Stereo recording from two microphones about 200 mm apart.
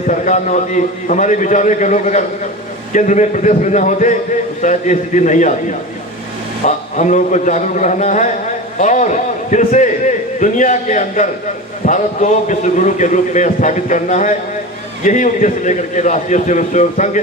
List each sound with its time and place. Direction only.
0.1 s a man's voice: 40° left (ahead or behind)
6.7 s a man's voice: 40° left (ahead or behind)